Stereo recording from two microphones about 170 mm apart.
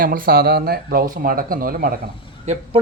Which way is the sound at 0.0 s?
55° right (ahead or behind).